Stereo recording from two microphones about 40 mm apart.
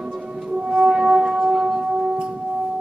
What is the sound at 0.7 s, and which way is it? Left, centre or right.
Shofar, centre.